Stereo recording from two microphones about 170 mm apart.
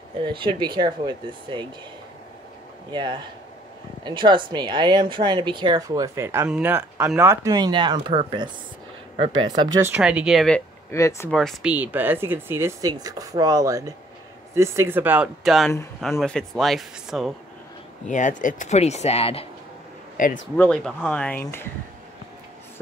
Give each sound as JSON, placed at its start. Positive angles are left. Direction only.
{"t": 0.2, "sound": "speech", "side_deg": -30}
{"t": 2.9, "sound": "speech", "side_deg": -25}
{"t": 9.5, "sound": "speech", "side_deg": -20}
{"t": 10.9, "sound": "speech", "side_deg": 15}
{"t": 11.2, "sound": "speech", "side_deg": 0}
{"t": 11.7, "sound": "speech", "side_deg": -10}
{"t": 18.0, "sound": "speech", "side_deg": 50}
{"t": 20.2, "sound": "speech", "side_deg": 50}
{"t": 20.5, "sound": "speech", "side_deg": 10}